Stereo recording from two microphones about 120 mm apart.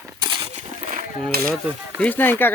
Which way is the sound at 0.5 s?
70° right (ahead or behind).